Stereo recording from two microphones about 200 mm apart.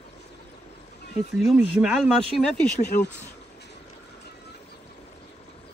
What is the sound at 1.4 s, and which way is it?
Speech, centre (ahead or behind).